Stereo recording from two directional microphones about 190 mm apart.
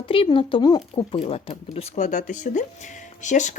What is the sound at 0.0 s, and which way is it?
Speech, 30° left (ahead or behind).